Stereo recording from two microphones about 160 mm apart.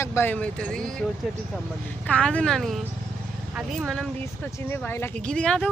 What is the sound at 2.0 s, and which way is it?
Speech, 5° left (ahead or behind).